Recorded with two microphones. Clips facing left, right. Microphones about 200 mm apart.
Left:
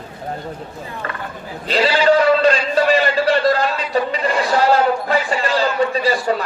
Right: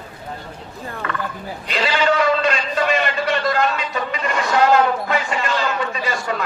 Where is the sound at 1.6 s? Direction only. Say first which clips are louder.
Left 5 dB; 35° left (ahead or behind).